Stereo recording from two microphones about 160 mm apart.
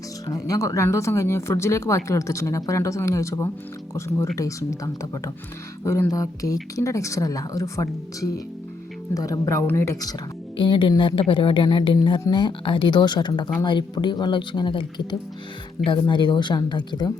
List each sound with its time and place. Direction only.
0.3 s a woman's voice: 20° left (ahead or behind)
10.6 s a woman's voice: 30° left (ahead or behind)